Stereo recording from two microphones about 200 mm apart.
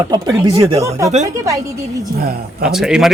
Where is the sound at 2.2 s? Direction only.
50° right (ahead or behind).